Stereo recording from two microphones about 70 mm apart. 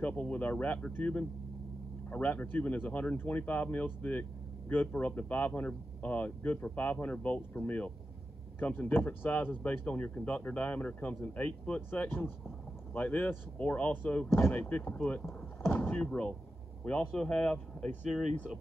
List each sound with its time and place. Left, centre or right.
0.0 s speech: left
16.1 s speech: centre